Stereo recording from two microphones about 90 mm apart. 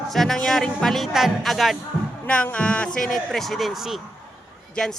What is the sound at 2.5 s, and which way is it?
Speech, 15° left (ahead or behind).